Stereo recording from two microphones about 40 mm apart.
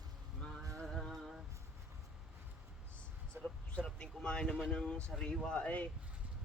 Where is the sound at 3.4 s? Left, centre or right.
Centre.